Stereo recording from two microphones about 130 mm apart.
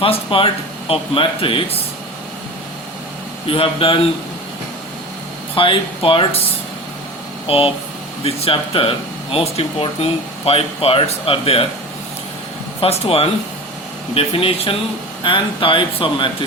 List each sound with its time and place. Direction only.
0.0 s speech: 45° left (ahead or behind)
3.5 s speech: 45° left (ahead or behind)
5.5 s speech: 40° left (ahead or behind)
7.4 s speech: 45° left (ahead or behind)
12.8 s speech: 50° left (ahead or behind)